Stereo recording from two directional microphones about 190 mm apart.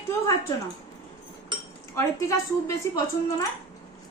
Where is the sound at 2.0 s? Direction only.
15° left (ahead or behind).